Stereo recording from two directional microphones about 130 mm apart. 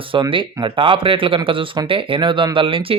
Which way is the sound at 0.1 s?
40° right (ahead or behind).